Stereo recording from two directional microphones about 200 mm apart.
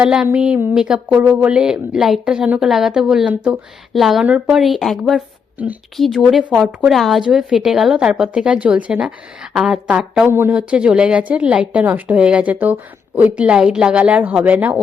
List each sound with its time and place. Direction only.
0.0 s speech: 5° right (ahead or behind)